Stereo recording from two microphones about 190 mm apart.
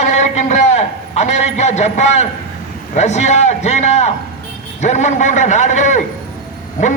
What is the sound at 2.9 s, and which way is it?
A man's voice, 35° left (ahead or behind).